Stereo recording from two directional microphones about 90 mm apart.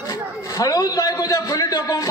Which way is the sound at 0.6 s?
40° left (ahead or behind).